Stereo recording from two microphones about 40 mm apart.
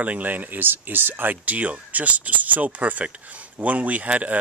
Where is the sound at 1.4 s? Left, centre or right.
Right.